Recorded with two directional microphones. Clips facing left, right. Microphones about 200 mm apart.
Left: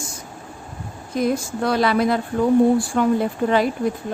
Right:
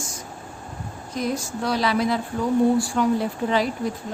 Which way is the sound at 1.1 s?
55° left (ahead or behind).